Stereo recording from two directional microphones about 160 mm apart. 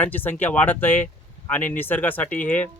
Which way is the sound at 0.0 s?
10° left (ahead or behind).